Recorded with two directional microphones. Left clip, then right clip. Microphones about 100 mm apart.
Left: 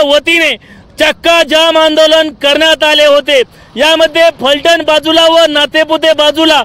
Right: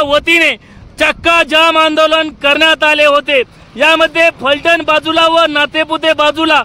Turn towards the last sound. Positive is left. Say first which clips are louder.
# left 3 dB
turn(degrees=30)  # may be behind; listen again after turning